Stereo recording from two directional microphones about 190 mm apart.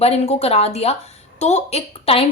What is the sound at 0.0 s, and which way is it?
Speech, 35° left (ahead or behind).